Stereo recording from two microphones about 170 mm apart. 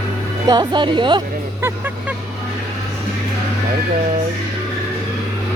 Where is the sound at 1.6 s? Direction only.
10° right (ahead or behind).